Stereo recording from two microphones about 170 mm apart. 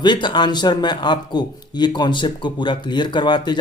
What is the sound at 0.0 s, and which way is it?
Speech, 25° left (ahead or behind).